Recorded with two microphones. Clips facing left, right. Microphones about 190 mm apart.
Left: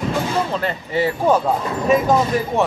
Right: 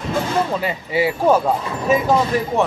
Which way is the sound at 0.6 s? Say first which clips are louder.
Right 1 dB; 10° right (ahead or behind).